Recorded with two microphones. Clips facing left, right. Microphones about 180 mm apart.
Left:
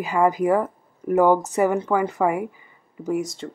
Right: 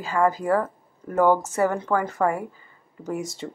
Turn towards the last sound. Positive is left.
turn(degrees=0)  # may be behind; listen again after turning